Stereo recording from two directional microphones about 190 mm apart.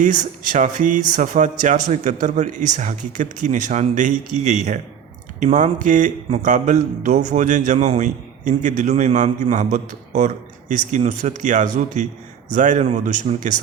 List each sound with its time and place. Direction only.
0.0 s speech: 40° right (ahead or behind)